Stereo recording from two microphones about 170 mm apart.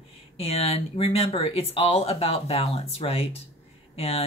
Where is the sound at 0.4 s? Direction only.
35° left (ahead or behind).